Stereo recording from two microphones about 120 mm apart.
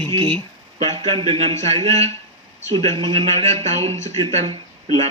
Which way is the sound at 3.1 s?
60° right (ahead or behind).